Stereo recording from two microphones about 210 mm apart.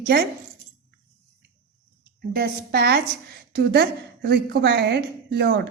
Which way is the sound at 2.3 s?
50° right (ahead or behind).